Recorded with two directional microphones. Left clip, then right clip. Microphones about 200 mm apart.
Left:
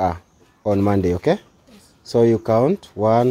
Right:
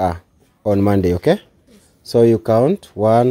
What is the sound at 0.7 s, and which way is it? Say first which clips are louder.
Speech: right 3 dB; 25° right (ahead or behind).